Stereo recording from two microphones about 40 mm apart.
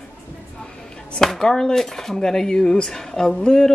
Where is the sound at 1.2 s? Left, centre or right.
Centre.